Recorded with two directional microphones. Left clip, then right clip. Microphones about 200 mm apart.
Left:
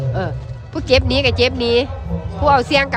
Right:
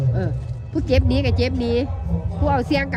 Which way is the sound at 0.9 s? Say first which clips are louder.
Left 7 dB; 15° left (ahead or behind).